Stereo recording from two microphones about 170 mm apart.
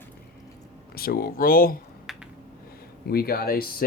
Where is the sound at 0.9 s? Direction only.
60° left (ahead or behind).